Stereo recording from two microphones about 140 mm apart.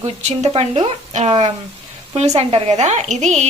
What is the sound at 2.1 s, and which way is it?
A woman's voice, 50° right (ahead or behind).